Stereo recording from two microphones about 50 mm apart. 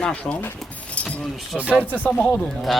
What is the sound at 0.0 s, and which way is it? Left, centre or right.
Speech, left.